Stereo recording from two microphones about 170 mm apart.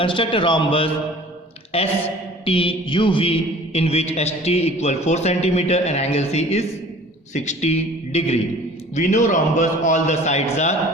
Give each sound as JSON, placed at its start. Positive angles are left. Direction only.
{"t": 0.0, "sound": "a man's voice", "side_deg": 30}